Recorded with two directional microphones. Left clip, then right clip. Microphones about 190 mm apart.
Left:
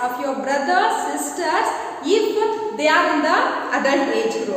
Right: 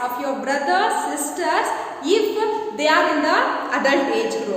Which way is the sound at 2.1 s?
15° right (ahead or behind).